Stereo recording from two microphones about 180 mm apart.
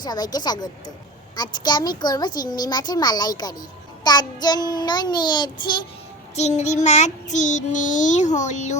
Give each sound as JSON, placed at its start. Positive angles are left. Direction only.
{"t": 0.0, "sound": "a child's voice", "side_deg": 20}
{"t": 6.3, "sound": "child singing", "side_deg": 40}